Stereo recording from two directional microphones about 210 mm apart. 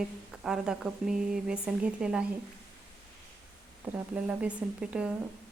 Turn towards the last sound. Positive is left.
turn(degrees=-5)  # may be behind; listen again after turning